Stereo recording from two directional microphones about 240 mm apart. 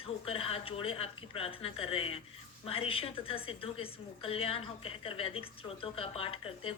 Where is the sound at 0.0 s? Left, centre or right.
Left.